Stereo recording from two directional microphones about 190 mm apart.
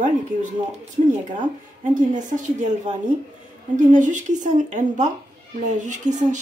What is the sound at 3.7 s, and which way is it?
A woman's voice, 40° right (ahead or behind).